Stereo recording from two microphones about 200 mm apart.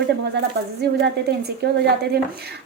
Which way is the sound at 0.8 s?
55° right (ahead or behind).